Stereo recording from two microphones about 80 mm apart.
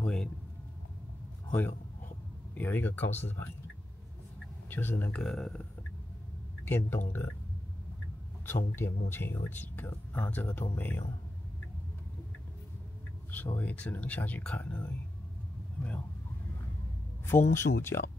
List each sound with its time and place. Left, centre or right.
0.0 s a sound: centre
1.5 s a man's voice: left
4.6 s speech: left
5.2 s speech: centre
6.6 s speech: left
8.5 s speech: left
13.3 s speech: left
17.3 s speech: left